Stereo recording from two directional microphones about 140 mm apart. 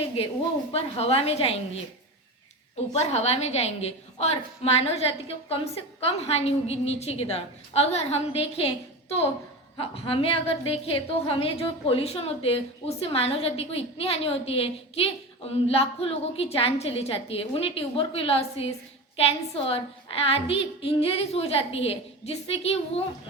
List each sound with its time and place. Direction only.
0.7 s a woman's voice: 45° left (ahead or behind)
2.9 s a woman's voice: 50° left (ahead or behind)